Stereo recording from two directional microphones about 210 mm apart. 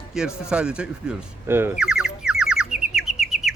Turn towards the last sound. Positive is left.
turn(degrees=0)  # may be behind; listen again after turning